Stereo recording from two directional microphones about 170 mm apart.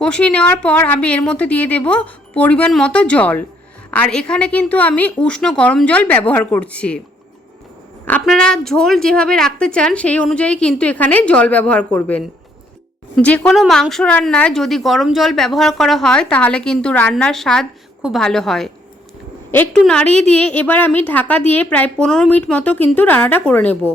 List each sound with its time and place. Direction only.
0.0 s a woman's voice: 5° left (ahead or behind)
8.2 s a woman's voice: 5° left (ahead or behind)
20.1 s a woman's voice: 40° right (ahead or behind)
20.5 s a woman's voice: 10° left (ahead or behind)